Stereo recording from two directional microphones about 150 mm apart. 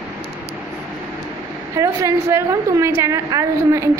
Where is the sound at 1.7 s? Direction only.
20° right (ahead or behind).